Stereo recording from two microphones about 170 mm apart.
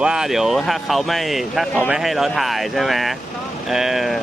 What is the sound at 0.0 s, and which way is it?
Speech, 5° right (ahead or behind).